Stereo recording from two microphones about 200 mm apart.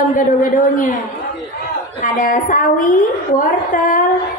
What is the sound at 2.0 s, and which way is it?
A woman's voice, 40° left (ahead or behind).